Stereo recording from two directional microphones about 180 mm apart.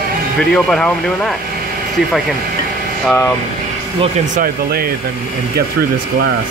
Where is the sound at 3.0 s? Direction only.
10° left (ahead or behind).